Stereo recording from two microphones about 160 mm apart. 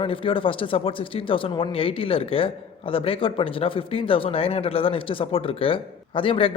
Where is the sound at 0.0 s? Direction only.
35° left (ahead or behind).